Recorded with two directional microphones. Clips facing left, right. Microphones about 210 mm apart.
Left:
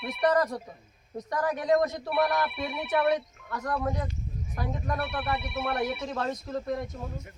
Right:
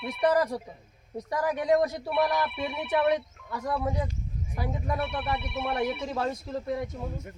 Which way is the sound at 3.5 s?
10° right (ahead or behind).